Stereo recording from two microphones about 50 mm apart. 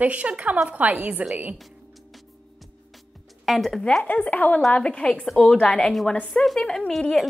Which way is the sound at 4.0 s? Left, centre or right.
Left.